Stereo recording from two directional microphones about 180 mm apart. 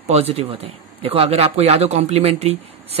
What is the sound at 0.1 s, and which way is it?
A man's voice, 35° right (ahead or behind).